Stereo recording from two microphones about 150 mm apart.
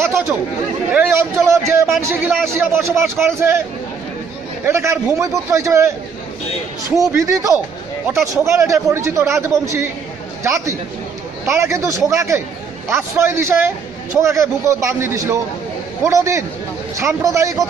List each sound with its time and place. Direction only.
0.0 s a man's voice: 15° right (ahead or behind)
4.6 s a man's voice: 20° right (ahead or behind)
7.0 s a man's voice: 20° right (ahead or behind)